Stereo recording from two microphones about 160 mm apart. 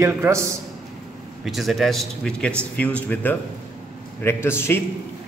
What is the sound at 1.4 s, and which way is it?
A man's voice, centre (ahead or behind).